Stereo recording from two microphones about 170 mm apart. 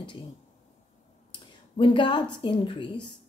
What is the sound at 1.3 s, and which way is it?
A woman's voice, 30° left (ahead or behind).